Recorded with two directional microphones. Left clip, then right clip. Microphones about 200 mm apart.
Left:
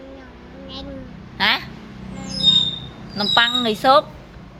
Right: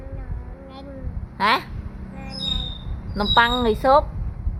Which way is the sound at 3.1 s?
25° right (ahead or behind).